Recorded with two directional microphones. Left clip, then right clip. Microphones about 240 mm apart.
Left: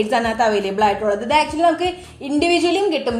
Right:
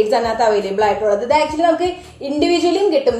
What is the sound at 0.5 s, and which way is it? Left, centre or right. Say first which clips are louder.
A woman's voice: right 2 dB; left.